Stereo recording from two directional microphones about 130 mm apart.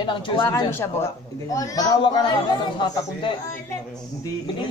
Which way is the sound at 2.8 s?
40° left (ahead or behind).